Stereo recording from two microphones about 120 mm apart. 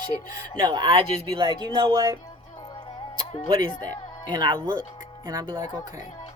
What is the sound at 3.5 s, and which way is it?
A woman's voice, 40° right (ahead or behind).